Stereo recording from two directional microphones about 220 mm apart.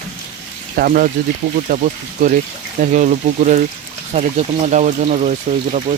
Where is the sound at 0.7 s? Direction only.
40° right (ahead or behind).